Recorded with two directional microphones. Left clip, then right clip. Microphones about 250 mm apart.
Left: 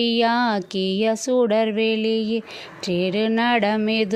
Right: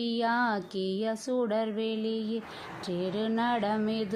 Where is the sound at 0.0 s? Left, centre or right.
Left.